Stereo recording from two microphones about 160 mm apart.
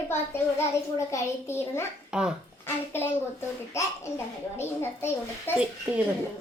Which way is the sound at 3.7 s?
20° left (ahead or behind).